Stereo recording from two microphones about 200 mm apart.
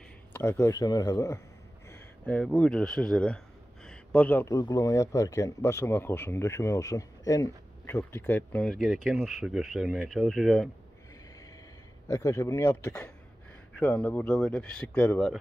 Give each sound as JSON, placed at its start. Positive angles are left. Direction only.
{"t": 0.3, "sound": "speech", "side_deg": 10}
{"t": 12.1, "sound": "speech", "side_deg": 15}